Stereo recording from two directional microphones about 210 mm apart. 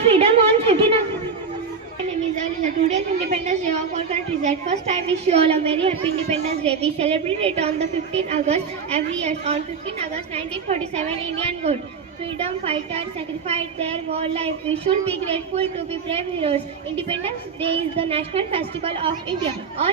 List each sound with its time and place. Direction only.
0.0 s a sound: 30° right (ahead or behind)
2.8 s a woman's voice: 35° right (ahead or behind)
10.3 s a woman's voice: 30° right (ahead or behind)